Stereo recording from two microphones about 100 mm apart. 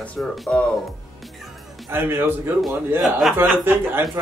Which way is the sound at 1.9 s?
20° right (ahead or behind).